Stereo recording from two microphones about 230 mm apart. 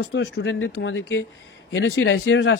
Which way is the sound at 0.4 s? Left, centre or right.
Left.